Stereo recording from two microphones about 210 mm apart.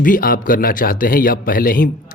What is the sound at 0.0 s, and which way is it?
A man's voice, 40° left (ahead or behind).